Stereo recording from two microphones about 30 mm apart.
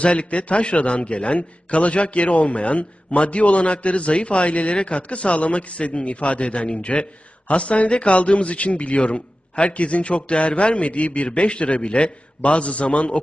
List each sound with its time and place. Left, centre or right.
0.0 s a man's voice: left